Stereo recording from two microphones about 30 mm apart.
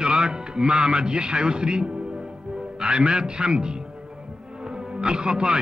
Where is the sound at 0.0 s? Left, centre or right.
Right.